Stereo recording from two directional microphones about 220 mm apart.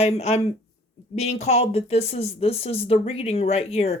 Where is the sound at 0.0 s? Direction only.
30° left (ahead or behind).